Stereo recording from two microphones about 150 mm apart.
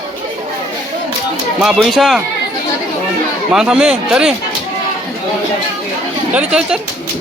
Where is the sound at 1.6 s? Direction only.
Centre (ahead or behind).